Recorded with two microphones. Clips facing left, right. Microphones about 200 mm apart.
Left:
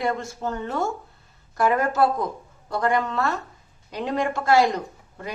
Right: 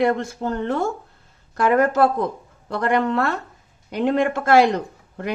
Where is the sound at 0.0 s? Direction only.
60° right (ahead or behind).